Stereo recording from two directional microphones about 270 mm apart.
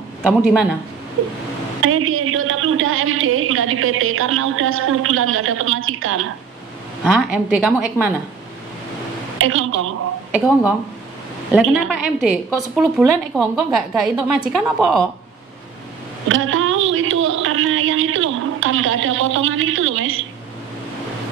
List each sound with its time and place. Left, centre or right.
0.2 s a woman's voice: centre
1.8 s a woman's voice: right
7.1 s a woman's voice: centre
9.4 s a woman's voice: right
10.3 s a woman's voice: centre
16.3 s speech: right